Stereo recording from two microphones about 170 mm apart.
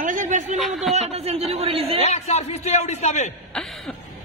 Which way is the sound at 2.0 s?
40° left (ahead or behind).